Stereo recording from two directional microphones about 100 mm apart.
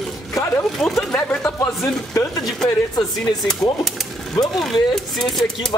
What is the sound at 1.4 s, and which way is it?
Speech, 30° left (ahead or behind).